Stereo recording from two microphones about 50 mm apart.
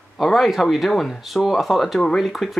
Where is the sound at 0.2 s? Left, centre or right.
Centre.